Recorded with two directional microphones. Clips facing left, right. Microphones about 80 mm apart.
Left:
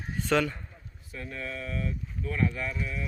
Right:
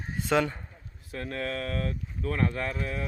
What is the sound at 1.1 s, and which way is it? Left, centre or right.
Speech, right.